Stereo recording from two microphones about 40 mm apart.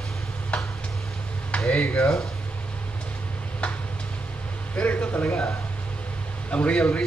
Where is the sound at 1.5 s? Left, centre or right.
Left.